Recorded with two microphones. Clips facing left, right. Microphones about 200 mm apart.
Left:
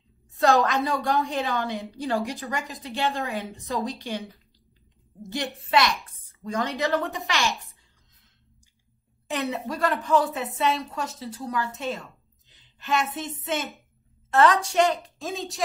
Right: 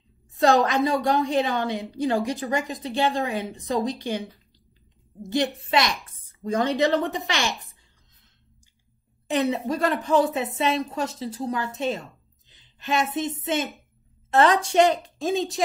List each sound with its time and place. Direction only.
0.4 s a woman's voice: 20° right (ahead or behind)
5.3 s a woman's voice: 20° right (ahead or behind)
9.3 s a woman's voice: 20° right (ahead or behind)
12.4 s a sound: 20° right (ahead or behind)
14.3 s a woman's voice: 20° right (ahead or behind)